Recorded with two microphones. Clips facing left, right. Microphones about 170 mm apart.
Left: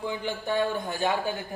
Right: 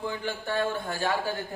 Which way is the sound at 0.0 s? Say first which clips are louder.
Left 1 dB; 15° left (ahead or behind).